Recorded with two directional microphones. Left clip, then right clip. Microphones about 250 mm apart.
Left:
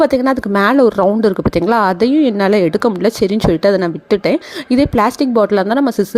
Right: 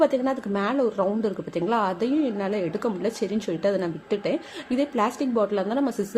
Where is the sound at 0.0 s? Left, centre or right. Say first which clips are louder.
Left 9 dB; left.